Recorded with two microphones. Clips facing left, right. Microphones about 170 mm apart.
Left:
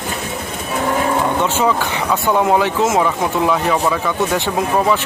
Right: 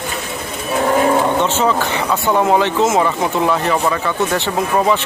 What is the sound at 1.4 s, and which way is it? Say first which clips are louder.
Speech: right 1 dB; 10° left (ahead or behind).